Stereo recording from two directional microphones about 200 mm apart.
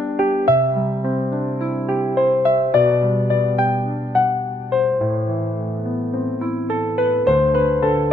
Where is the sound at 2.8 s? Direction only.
15° right (ahead or behind).